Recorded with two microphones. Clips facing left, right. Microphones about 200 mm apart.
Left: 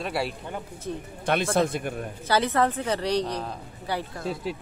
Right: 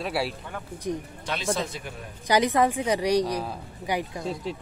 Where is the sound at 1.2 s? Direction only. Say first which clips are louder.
Left 7 dB; 55° left (ahead or behind).